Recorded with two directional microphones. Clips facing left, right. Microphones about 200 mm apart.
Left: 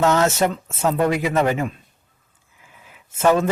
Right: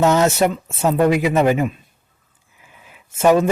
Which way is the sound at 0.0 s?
15° right (ahead or behind).